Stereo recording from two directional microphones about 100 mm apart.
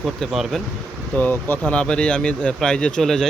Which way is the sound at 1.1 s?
15° left (ahead or behind).